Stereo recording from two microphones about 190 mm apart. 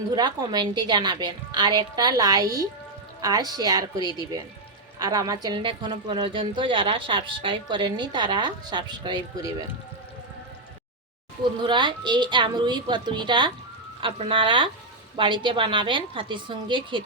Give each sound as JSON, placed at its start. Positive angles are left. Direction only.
{"t": 0.1, "sound": "a woman's voice", "side_deg": -25}
{"t": 11.4, "sound": "a woman's voice", "side_deg": -25}